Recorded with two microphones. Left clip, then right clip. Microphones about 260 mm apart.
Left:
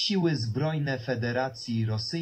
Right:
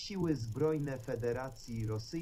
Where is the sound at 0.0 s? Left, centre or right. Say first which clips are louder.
Left 9 dB; left.